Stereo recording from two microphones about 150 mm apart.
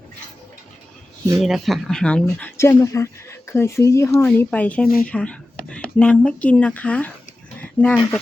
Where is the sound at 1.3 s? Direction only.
Centre (ahead or behind).